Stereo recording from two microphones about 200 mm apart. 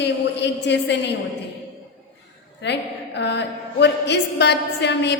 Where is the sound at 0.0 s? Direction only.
60° left (ahead or behind).